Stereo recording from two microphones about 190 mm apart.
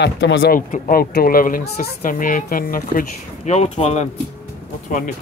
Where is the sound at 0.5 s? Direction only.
45° left (ahead or behind).